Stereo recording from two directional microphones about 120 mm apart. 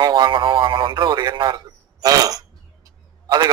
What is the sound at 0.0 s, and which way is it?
Speech, 40° right (ahead or behind).